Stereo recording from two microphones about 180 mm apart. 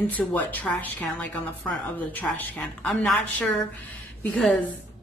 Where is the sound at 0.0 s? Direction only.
10° left (ahead or behind).